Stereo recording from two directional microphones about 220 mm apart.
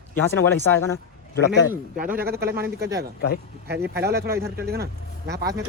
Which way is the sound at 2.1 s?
45° right (ahead or behind).